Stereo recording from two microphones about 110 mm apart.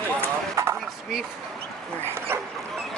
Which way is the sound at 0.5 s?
25° right (ahead or behind).